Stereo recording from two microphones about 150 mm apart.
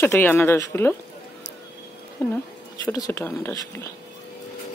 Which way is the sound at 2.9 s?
15° left (ahead or behind).